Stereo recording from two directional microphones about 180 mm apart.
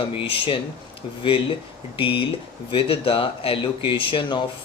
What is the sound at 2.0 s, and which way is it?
Speech, 30° left (ahead or behind).